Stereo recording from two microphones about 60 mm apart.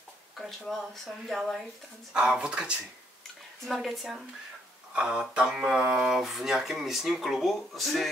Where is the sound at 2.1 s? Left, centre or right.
Centre.